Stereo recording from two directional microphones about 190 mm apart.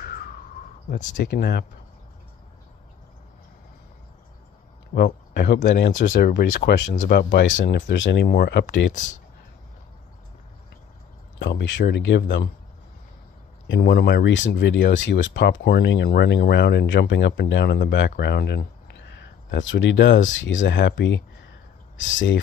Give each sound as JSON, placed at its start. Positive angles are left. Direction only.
{"t": 0.1, "sound": "a sound", "side_deg": 50}
{"t": 0.8, "sound": "speech", "side_deg": 40}
{"t": 1.2, "sound": "speech", "side_deg": 60}
{"t": 4.9, "sound": "speech", "side_deg": 60}
{"t": 11.3, "sound": "speech", "side_deg": 70}
{"t": 13.7, "sound": "speech", "side_deg": 60}
{"t": 19.5, "sound": "speech", "side_deg": 75}
{"t": 21.9, "sound": "speech", "side_deg": 85}